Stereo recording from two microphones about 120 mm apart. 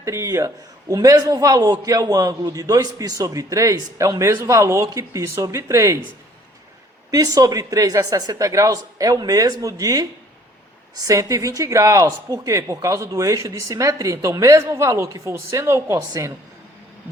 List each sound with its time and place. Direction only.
0.0 s a man's voice: 25° right (ahead or behind)
7.1 s a man's voice: 30° right (ahead or behind)